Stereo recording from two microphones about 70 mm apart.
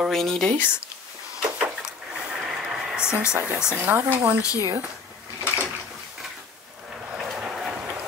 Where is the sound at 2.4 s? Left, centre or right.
Centre.